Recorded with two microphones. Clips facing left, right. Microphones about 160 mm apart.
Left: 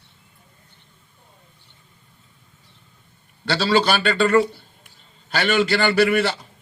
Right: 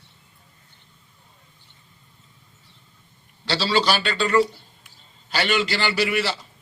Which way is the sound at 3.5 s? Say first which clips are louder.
Left 3 dB; 55° left (ahead or behind).